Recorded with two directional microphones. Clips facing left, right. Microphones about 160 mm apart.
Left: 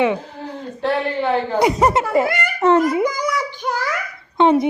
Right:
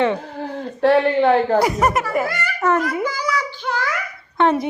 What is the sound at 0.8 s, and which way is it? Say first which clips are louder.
Speech: right 6 dB; 45° right (ahead or behind).